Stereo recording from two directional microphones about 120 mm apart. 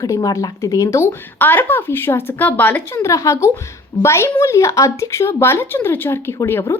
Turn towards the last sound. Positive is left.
turn(degrees=25)  # may be behind; listen again after turning